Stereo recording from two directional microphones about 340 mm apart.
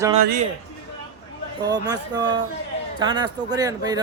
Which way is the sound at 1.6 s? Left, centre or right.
Centre.